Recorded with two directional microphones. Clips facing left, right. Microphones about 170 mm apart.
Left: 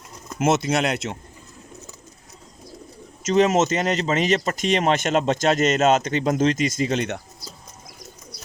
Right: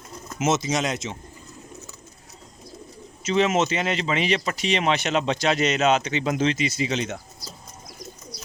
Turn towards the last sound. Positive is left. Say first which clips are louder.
# left 3 dB
turn(degrees=60)  # may be behind; listen again after turning